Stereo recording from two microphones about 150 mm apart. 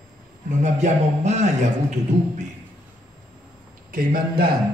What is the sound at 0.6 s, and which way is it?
A man's voice, 50° right (ahead or behind).